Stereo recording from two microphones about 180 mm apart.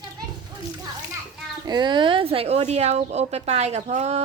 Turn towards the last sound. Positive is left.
turn(degrees=-40)  # may be behind; listen again after turning